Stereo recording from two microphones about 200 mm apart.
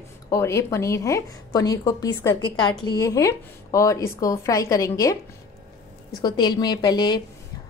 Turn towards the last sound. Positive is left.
turn(degrees=20)  # may be behind; listen again after turning